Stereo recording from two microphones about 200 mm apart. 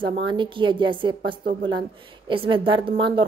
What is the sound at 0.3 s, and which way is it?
A woman's voice, 25° right (ahead or behind).